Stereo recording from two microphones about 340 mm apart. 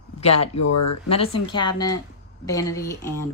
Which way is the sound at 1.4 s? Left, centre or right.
Centre.